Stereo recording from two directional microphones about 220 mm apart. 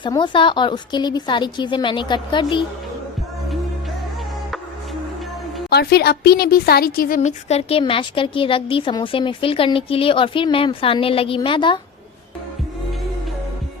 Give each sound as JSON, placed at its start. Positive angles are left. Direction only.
{"t": 0.0, "sound": "a woman's voice", "side_deg": 20}
{"t": 5.7, "sound": "a woman's voice", "side_deg": 45}